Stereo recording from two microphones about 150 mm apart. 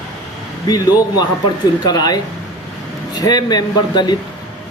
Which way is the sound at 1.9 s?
25° left (ahead or behind).